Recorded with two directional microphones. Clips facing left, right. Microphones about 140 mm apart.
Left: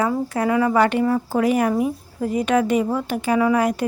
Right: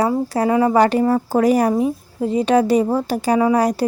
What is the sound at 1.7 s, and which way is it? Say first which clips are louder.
Speech: right 3 dB; 25° right (ahead or behind).